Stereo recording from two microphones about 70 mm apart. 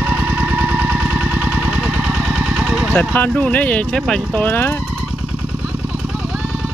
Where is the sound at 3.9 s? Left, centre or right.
Centre.